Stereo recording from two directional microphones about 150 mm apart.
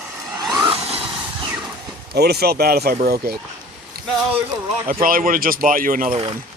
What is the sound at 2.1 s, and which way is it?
Speech, 90° right.